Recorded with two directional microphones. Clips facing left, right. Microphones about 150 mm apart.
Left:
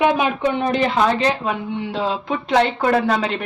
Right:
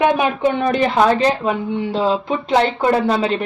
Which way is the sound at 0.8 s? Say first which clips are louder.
Right 4 dB; 35° right (ahead or behind).